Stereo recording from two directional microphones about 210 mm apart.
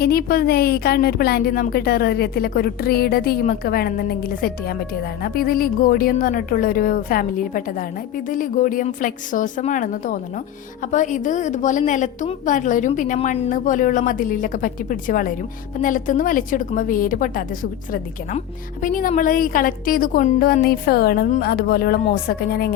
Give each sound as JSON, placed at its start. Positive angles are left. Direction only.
{"t": 0.0, "sound": "a woman's voice", "side_deg": 45}